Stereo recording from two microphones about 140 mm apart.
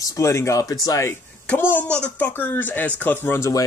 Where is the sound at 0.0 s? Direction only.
20° left (ahead or behind).